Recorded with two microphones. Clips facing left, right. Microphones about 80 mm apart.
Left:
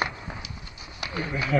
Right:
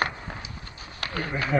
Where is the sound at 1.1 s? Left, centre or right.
Right.